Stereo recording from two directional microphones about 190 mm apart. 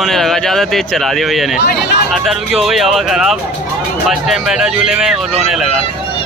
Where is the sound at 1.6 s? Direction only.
60° left (ahead or behind).